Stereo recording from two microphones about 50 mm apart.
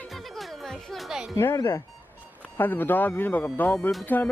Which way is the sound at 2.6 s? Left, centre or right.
Left.